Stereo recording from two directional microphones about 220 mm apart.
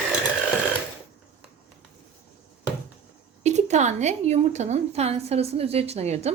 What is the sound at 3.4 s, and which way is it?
A woman's voice, 30° right (ahead or behind).